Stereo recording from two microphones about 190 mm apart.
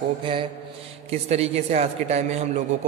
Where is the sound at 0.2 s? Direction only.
25° right (ahead or behind).